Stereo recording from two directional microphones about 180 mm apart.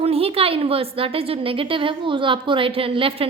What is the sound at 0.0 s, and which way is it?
A woman's voice, 35° right (ahead or behind).